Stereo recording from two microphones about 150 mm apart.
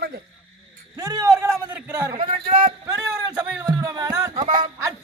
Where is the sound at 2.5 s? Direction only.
60° right (ahead or behind).